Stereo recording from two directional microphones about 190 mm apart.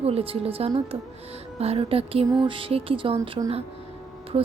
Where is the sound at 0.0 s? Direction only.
30° right (ahead or behind).